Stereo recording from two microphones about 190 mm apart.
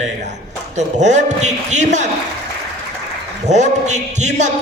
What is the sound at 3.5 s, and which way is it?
A man's voice, 40° right (ahead or behind).